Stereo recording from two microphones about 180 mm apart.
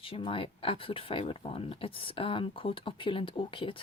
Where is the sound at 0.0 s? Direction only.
30° left (ahead or behind).